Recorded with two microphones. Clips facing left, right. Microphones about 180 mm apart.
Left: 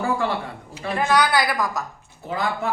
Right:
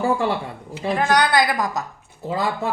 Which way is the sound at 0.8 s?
20° right (ahead or behind).